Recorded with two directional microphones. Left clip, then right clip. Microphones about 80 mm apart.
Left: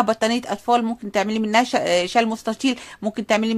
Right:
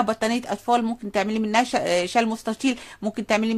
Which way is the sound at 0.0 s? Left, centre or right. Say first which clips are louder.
Left 3 dB; left.